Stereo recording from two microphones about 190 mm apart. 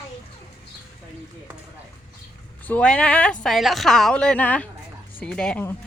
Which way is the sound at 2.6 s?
5° left (ahead or behind).